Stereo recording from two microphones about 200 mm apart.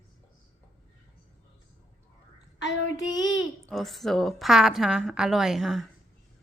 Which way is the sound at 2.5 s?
65° left (ahead or behind).